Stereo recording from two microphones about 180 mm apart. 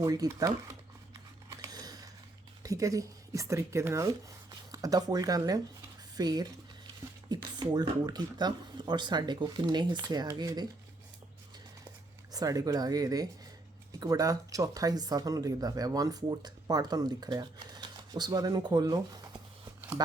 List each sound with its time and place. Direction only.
0.0 s speech: 20° right (ahead or behind)
1.5 s a sound: 20° right (ahead or behind)
2.6 s speech: 20° right (ahead or behind)
12.3 s speech: 20° right (ahead or behind)